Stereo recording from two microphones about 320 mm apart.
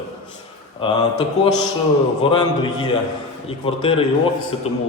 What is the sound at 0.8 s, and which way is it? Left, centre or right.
A man's voice, centre.